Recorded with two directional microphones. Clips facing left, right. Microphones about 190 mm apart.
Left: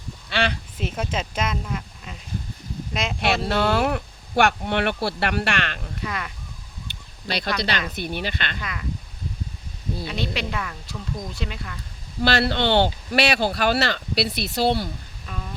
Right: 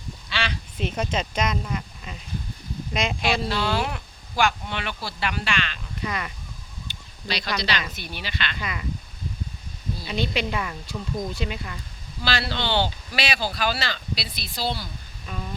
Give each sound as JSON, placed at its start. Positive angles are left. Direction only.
{"t": 0.3, "sound": "a sound", "side_deg": 55}
{"t": 0.8, "sound": "speech", "side_deg": 5}
{"t": 3.5, "sound": "speech", "side_deg": 60}
{"t": 6.0, "sound": "speech", "side_deg": 0}
{"t": 6.9, "sound": "a sound", "side_deg": 65}
{"t": 7.3, "sound": "speech", "side_deg": 55}
{"t": 8.6, "sound": "speech", "side_deg": -5}
{"t": 10.1, "sound": "speech", "side_deg": 0}
{"t": 12.2, "sound": "speech", "side_deg": 55}
{"t": 15.3, "sound": "a sound", "side_deg": -5}